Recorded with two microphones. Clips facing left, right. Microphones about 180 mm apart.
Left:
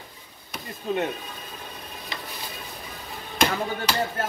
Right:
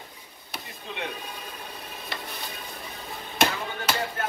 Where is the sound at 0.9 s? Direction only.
45° left (ahead or behind).